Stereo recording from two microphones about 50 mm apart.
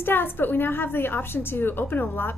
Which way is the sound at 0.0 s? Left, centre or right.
Left.